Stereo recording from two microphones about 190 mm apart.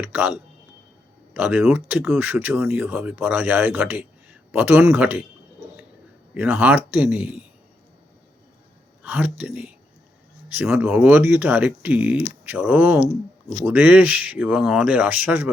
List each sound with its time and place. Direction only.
0.0 s speech: 10° right (ahead or behind)
6.3 s speech: 10° right (ahead or behind)
9.0 s speech: 10° right (ahead or behind)